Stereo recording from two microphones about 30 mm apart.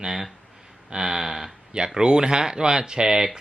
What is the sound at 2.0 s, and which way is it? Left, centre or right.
Speech, right.